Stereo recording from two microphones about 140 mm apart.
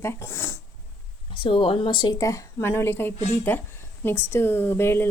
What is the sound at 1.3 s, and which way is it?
Speech, 40° left (ahead or behind).